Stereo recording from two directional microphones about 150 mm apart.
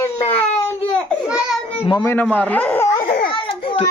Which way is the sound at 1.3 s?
5° right (ahead or behind).